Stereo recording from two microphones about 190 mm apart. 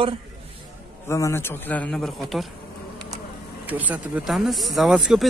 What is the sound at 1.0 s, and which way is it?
Speech, 15° left (ahead or behind).